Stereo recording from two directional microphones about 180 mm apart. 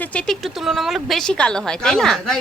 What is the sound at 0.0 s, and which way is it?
A woman's voice, 5° left (ahead or behind).